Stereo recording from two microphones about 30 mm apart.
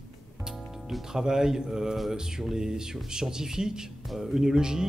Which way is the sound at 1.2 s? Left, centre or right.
Right.